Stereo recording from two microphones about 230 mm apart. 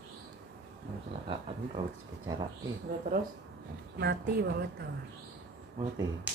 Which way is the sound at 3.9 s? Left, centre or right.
Right.